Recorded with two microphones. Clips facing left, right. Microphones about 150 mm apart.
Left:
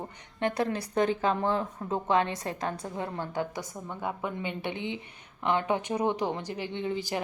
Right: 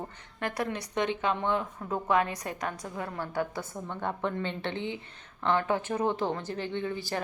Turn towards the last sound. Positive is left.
turn(degrees=15)  # may be behind; listen again after turning